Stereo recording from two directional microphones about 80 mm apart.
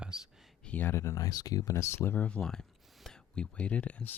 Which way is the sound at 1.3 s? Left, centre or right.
Left.